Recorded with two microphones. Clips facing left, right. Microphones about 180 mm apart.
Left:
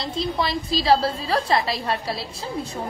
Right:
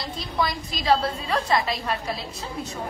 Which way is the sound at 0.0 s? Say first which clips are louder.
Left 3 dB; 25° left (ahead or behind).